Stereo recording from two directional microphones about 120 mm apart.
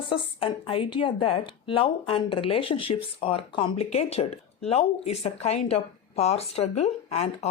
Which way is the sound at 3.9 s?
60° left (ahead or behind).